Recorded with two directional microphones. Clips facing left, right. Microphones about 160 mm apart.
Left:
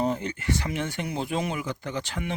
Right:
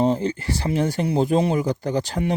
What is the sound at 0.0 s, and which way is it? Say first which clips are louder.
Speech: right 6 dB; 30° right (ahead or behind).